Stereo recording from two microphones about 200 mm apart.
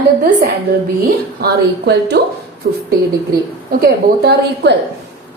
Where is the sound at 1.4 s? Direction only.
55° right (ahead or behind).